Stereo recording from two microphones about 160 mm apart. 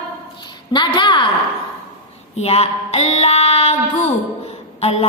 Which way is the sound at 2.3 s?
40° left (ahead or behind).